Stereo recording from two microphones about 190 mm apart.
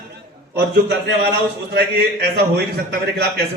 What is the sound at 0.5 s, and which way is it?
A man's voice, 60° right (ahead or behind).